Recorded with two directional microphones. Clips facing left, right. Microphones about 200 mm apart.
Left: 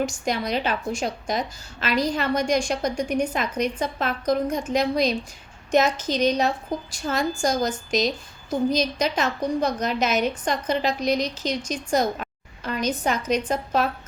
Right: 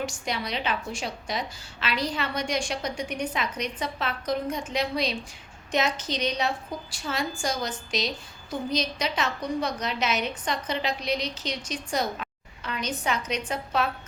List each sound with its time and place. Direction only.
0.0 s a woman's voice: 45° left (ahead or behind)